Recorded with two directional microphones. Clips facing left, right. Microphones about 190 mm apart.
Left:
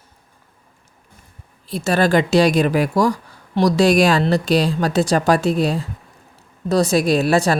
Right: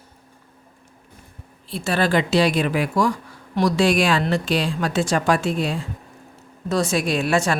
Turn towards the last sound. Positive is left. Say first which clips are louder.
# left 4 dB
turn(degrees=35)  # may be behind; listen again after turning